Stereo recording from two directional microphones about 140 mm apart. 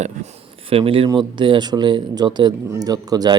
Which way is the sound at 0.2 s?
65° right (ahead or behind).